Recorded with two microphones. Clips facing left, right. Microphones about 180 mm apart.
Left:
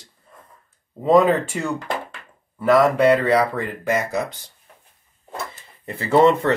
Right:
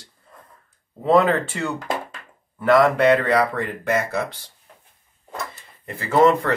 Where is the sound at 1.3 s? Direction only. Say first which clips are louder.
Left 2 dB; 10° left (ahead or behind).